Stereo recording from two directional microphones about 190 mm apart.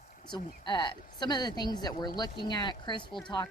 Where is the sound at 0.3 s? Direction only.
25° left (ahead or behind).